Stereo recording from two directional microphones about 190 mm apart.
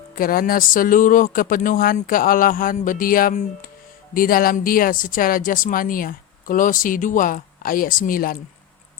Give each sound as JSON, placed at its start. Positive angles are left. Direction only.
{"t": 0.2, "sound": "speech", "side_deg": 50}